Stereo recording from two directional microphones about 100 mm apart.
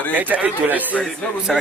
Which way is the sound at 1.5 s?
Centre (ahead or behind).